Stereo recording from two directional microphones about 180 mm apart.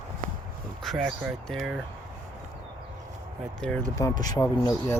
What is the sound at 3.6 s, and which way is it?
Speech, 5° left (ahead or behind).